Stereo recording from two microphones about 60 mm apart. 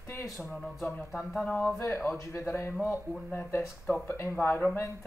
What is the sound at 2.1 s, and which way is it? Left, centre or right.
Speech, left.